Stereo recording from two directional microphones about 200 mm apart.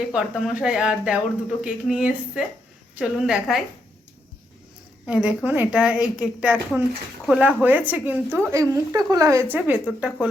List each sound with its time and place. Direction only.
0.0 s a woman's voice: 5° right (ahead or behind)
5.0 s a woman's voice: 5° right (ahead or behind)